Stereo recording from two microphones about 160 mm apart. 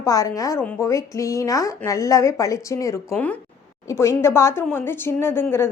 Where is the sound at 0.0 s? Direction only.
20° left (ahead or behind).